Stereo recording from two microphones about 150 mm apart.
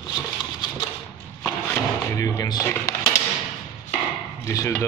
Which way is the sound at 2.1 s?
20° left (ahead or behind).